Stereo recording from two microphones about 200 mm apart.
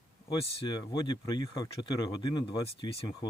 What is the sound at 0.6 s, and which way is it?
Speech, 20° left (ahead or behind).